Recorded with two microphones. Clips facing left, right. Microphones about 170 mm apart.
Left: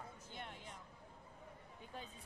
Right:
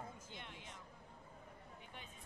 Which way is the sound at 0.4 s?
45° left (ahead or behind).